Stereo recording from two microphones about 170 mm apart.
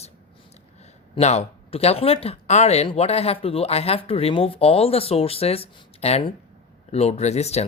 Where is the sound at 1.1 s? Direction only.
40° left (ahead or behind).